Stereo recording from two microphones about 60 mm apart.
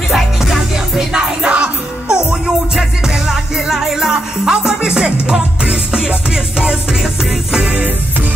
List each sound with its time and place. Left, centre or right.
0.1 s music: centre